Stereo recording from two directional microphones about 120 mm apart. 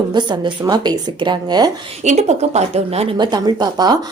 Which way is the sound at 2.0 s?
70° right (ahead or behind).